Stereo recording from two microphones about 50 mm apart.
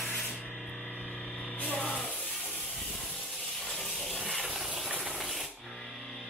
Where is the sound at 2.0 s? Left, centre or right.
Centre.